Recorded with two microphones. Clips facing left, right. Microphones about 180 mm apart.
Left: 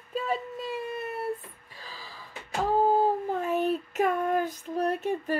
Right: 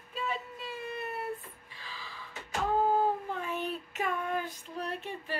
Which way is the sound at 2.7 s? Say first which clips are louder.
Left 4 dB; 35° left (ahead or behind).